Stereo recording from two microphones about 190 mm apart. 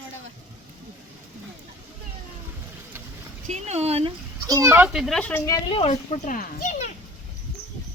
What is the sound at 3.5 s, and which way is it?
Speech, 35° right (ahead or behind).